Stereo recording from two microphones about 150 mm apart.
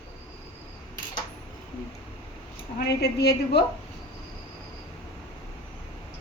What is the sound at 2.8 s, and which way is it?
Speech, 90° left.